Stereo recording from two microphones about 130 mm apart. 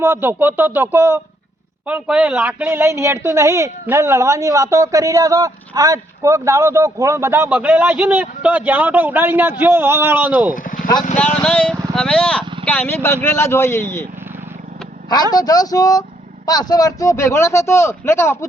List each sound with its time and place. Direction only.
0.0 s a man's voice: 20° right (ahead or behind)
10.5 s vehicle: 90° left
11.4 s speech: 5° left (ahead or behind)
15.1 s speech: 30° left (ahead or behind)